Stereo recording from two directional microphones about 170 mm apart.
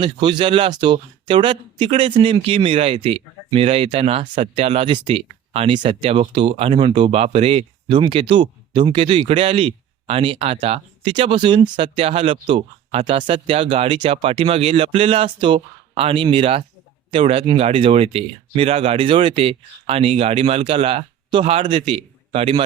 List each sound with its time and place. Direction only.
0.0 s speech: 30° right (ahead or behind)